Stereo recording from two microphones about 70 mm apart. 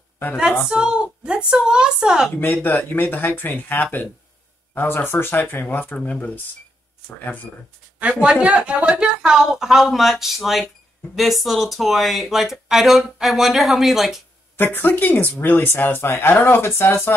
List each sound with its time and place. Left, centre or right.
0.7 s speech: centre
2.4 s speech: left
8.0 s speech: centre
14.6 s speech: left